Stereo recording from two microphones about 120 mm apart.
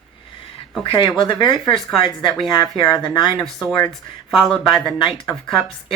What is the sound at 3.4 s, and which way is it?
Speech, centre (ahead or behind).